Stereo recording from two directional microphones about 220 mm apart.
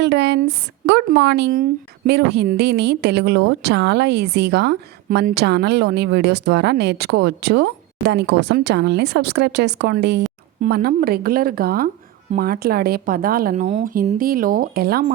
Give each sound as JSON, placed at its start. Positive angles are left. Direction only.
{"t": 0.0, "sound": "speech", "side_deg": -50}